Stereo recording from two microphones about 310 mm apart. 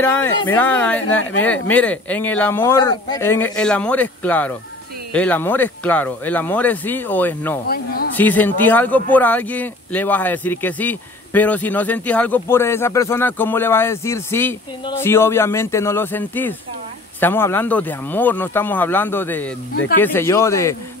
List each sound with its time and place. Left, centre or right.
0.0 s speech: centre
7.6 s speech: left
8.2 s speech: centre
19.7 s speech: left
20.0 s speech: centre